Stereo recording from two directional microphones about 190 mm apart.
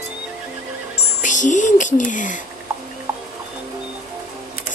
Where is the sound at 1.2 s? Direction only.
40° left (ahead or behind).